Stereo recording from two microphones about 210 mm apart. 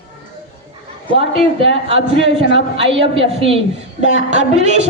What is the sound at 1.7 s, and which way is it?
A man's voice, 25° right (ahead or behind).